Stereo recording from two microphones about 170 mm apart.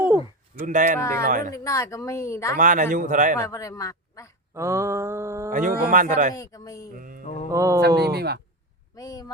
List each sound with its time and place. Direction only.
0.6 s speech: 50° right (ahead or behind)
0.9 s speech: 15° left (ahead or behind)
1.3 s speech: 50° right (ahead or behind)
1.5 s speech: 20° left (ahead or behind)
2.6 s speech: 50° right (ahead or behind)
3.5 s a man's voice: 20° left (ahead or behind)
4.5 s mantra: 15° right (ahead or behind)
5.5 s speech: 50° right (ahead or behind)
6.3 s speech: 20° left (ahead or behind)
6.9 s mantra: 55° right (ahead or behind)
7.5 s mantra: 20° right (ahead or behind)
7.8 s speech: 70° right (ahead or behind)
9.0 s a sound: 20° left (ahead or behind)